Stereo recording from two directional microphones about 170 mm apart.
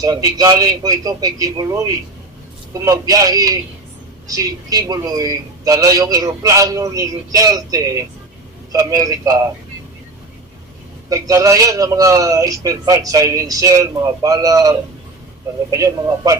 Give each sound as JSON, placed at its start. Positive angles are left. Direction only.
{"t": 0.0, "sound": "a man's voice", "side_deg": -20}
{"t": 2.8, "sound": "a man's voice", "side_deg": -20}
{"t": 11.1, "sound": "a man's voice", "side_deg": -20}